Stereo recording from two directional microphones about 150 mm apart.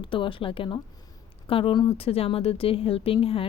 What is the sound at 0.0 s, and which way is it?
Speech, 35° left (ahead or behind).